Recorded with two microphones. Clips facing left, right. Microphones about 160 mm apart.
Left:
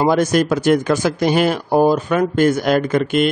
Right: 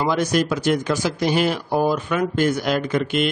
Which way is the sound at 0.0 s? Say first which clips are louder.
Left 5 dB; 50° left (ahead or behind).